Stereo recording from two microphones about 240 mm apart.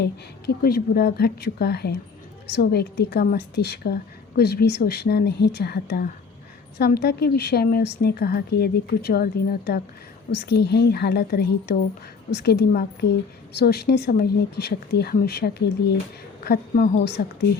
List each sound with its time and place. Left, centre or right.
0.0 s a woman's voice: left